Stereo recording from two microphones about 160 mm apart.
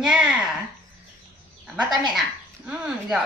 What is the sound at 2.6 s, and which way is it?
Speech, 5° right (ahead or behind).